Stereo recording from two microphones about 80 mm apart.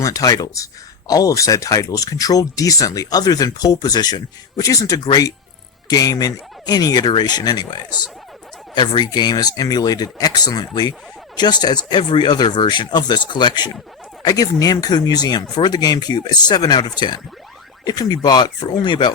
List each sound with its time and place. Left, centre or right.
0.0 s speech: left
11.9 s speech: left
14.2 s speech: left